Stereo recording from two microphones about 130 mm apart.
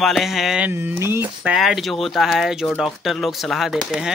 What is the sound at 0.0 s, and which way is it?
Speech, centre (ahead or behind).